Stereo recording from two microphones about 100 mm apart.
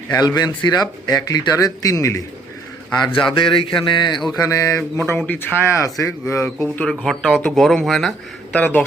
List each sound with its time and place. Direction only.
0.1 s speech: 40° left (ahead or behind)
3.1 s speech: 55° left (ahead or behind)
4.4 s speech: 35° left (ahead or behind)
4.8 s speech: 20° left (ahead or behind)
5.7 s speech: 30° left (ahead or behind)
6.8 s speech: 5° left (ahead or behind)
8.5 s speech: 15° left (ahead or behind)